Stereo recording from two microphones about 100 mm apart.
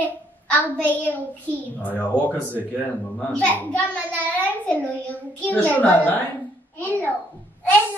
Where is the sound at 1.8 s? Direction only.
15° left (ahead or behind).